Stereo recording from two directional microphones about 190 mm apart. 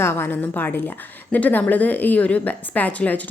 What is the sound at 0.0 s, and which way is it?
A woman's voice, 10° left (ahead or behind).